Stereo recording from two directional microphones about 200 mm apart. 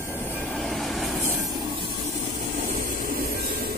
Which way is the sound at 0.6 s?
Centre (ahead or behind).